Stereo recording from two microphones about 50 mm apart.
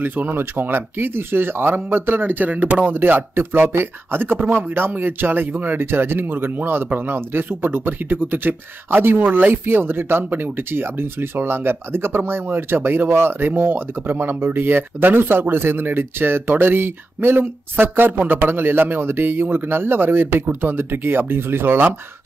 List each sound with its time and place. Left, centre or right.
0.0 s speech: right